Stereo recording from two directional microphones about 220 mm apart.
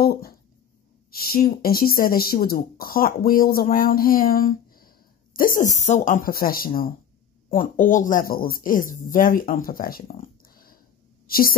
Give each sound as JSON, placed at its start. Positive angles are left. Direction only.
{"t": 0.0, "sound": "speech", "side_deg": 45}